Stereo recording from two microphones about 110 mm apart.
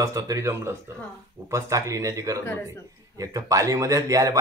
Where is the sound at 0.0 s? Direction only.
30° right (ahead or behind).